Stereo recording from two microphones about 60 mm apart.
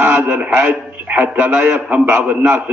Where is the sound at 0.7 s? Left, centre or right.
Right.